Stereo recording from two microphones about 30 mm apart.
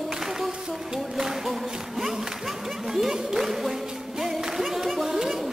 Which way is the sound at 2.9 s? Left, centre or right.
Centre.